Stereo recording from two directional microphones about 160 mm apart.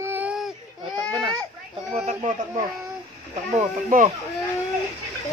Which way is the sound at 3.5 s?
45° right (ahead or behind).